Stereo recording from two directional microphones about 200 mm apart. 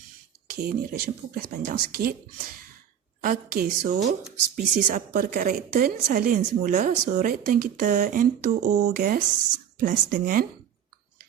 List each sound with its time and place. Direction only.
0.4 s a woman's voice: 50° right (ahead or behind)
3.2 s a woman's voice: 40° right (ahead or behind)
9.0 s a woman's voice: 50° right (ahead or behind)